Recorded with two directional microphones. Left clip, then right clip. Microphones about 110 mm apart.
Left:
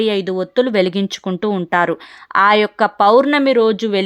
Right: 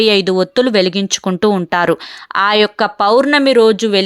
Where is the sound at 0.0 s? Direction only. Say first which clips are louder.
Right 6 dB; 30° right (ahead or behind).